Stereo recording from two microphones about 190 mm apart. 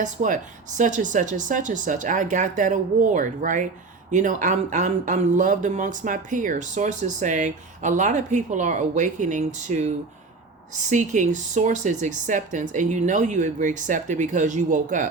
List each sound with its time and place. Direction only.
0.0 s speech: 40° right (ahead or behind)